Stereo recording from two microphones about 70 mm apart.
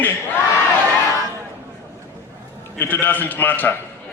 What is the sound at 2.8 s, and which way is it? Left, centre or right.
Speech, left.